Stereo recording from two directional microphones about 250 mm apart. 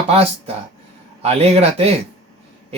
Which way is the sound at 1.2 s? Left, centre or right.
Right.